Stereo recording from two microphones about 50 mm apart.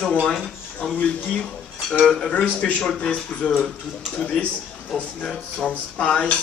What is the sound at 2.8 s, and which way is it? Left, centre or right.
Speech, centre.